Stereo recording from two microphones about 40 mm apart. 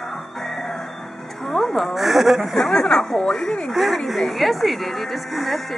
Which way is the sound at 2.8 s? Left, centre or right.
Centre.